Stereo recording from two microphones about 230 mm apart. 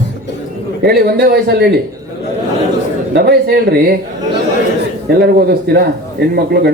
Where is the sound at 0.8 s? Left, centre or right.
Right.